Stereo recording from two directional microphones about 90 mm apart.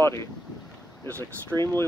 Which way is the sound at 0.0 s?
30° left (ahead or behind).